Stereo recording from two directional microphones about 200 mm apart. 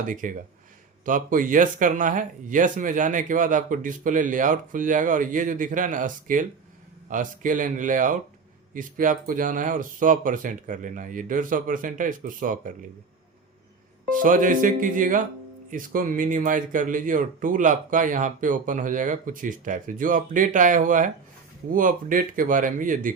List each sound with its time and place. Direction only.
0.1 s speech: 40° right (ahead or behind)
14.1 s speech: 40° right (ahead or behind)